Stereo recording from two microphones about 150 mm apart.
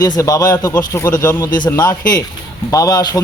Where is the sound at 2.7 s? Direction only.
25° left (ahead or behind).